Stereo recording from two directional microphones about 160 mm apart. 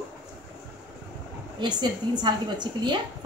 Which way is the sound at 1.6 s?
25° right (ahead or behind).